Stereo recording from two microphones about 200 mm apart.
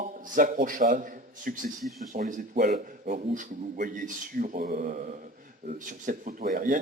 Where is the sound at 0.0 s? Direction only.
40° right (ahead or behind).